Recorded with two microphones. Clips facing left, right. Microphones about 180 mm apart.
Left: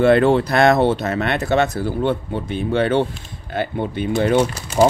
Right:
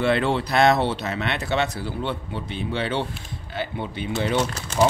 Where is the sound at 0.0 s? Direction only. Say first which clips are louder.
Left 8 dB; 50° left (ahead or behind).